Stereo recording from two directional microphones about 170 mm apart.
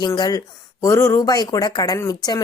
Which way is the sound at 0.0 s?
25° left (ahead or behind).